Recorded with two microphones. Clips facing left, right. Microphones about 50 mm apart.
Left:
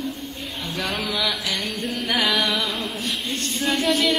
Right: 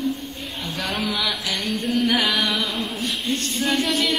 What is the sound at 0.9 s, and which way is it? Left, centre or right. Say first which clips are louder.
Music: right 1 dB; centre.